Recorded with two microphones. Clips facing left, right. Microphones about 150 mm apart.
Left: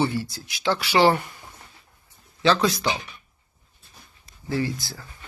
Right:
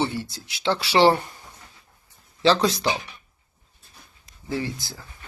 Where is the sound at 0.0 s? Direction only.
25° right (ahead or behind).